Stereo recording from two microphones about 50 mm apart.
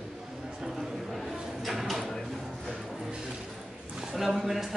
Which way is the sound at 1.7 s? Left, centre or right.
Centre.